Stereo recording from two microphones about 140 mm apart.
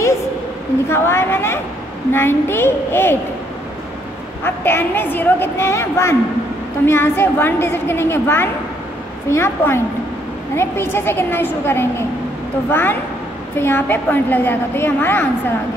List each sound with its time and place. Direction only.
0.8 s a woman's voice: 20° left (ahead or behind)
4.6 s a woman's voice: 15° left (ahead or behind)